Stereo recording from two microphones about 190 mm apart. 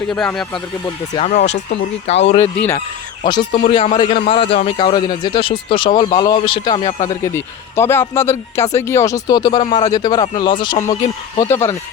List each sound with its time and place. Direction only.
0.1 s speech: 5° left (ahead or behind)
1.1 s a man's voice: 35° left (ahead or behind)
11.3 s speech: 15° left (ahead or behind)